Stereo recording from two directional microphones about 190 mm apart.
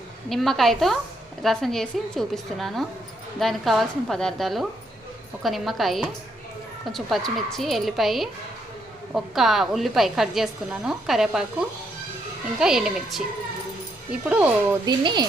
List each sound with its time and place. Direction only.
0.3 s a woman's voice: centre (ahead or behind)
12.5 s a woman's voice: 5° right (ahead or behind)
14.3 s speech: 5° right (ahead or behind)
14.8 s speech: 25° right (ahead or behind)